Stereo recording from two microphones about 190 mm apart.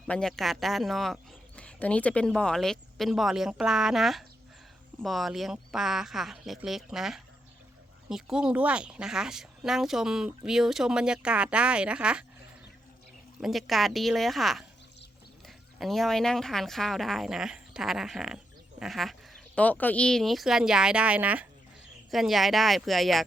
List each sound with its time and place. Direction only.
0.1 s speech: 5° left (ahead or behind)
13.4 s speech: centre (ahead or behind)